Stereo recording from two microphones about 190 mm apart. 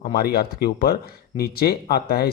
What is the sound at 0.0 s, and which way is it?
Speech, 55° left (ahead or behind).